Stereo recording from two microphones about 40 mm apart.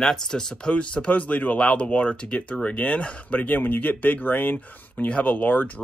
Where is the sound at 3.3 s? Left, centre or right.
Left.